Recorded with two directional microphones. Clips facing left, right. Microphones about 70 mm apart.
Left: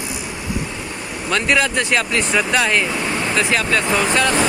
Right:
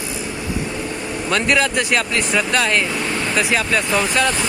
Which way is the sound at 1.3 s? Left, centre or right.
Centre.